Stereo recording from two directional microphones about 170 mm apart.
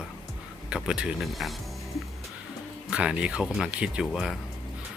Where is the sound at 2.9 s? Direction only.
5° right (ahead or behind).